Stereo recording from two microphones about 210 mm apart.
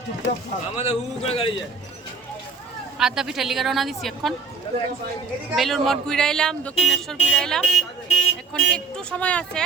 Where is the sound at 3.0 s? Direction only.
Centre (ahead or behind).